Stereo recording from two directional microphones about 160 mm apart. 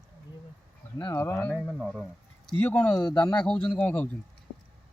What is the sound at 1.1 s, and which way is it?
Speech, 10° left (ahead or behind).